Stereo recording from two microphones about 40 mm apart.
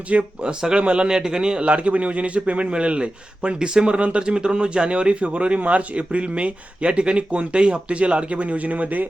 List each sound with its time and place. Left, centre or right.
0.1 s a man's voice: right
1.0 s a man's voice: centre
1.7 s a man's voice: right